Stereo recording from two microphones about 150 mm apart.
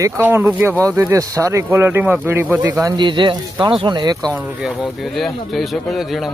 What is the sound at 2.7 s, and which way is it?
Speech, 25° right (ahead or behind).